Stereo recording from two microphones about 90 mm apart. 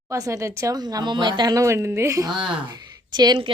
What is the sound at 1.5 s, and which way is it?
Speech, 30° right (ahead or behind).